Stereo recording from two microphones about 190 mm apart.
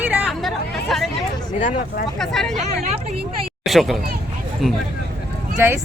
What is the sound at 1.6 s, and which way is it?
Speech, 45° left (ahead or behind).